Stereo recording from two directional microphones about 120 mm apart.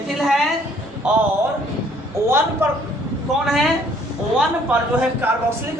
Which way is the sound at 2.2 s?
20° right (ahead or behind).